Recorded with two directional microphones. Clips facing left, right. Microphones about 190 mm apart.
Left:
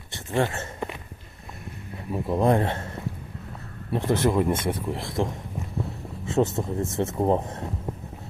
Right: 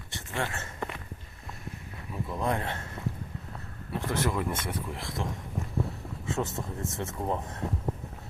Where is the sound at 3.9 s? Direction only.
25° left (ahead or behind).